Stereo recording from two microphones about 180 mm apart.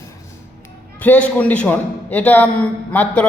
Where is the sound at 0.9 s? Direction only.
10° left (ahead or behind).